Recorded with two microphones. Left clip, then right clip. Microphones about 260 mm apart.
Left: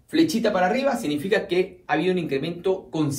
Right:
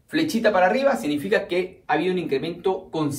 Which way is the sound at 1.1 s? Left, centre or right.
Centre.